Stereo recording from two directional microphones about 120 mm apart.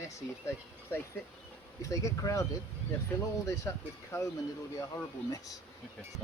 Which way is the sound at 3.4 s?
25° left (ahead or behind).